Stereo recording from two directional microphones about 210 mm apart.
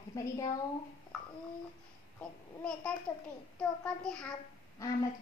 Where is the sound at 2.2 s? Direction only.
5° left (ahead or behind).